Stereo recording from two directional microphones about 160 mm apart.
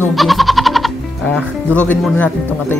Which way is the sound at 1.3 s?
10° left (ahead or behind).